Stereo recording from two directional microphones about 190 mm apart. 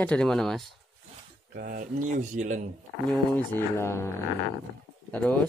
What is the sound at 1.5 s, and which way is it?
Speech, 55° right (ahead or behind).